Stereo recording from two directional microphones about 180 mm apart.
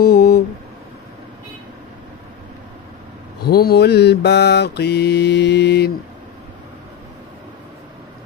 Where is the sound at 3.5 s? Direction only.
60° left (ahead or behind).